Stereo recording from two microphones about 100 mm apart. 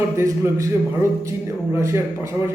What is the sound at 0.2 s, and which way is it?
Speech, 30° right (ahead or behind).